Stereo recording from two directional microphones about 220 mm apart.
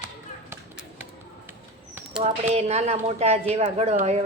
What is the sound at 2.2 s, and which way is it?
A woman's voice, 30° right (ahead or behind).